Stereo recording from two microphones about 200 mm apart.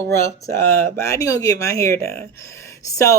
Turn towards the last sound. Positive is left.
turn(degrees=15)  # may be behind; listen again after turning